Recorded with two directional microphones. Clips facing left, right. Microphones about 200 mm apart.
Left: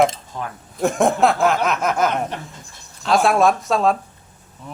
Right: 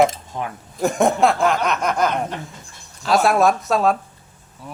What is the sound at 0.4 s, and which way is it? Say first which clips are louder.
Speech: right 2 dB; 15° right (ahead or behind).